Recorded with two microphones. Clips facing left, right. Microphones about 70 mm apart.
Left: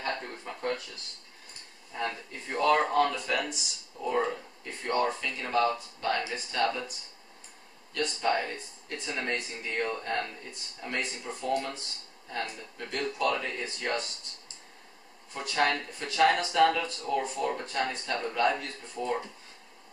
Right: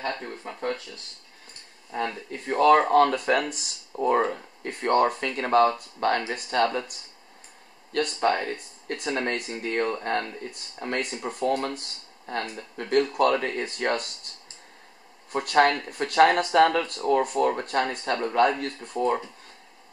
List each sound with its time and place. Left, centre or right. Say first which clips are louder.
2.4 s speech: right 7 dB; right
7.9 s speech: right 5 dB; right
15.3 s speech: right 7 dB; right